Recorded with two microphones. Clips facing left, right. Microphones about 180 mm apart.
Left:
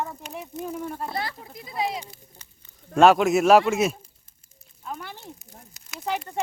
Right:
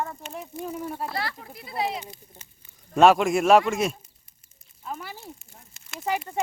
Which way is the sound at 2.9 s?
Centre (ahead or behind).